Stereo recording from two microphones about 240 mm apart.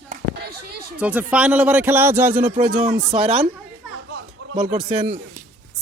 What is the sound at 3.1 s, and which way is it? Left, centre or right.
Speech, right.